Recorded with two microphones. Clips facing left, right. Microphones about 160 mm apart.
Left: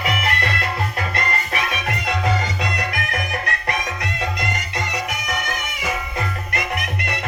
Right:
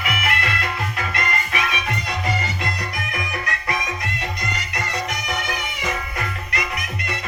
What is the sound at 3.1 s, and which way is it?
Music, 55° left (ahead or behind).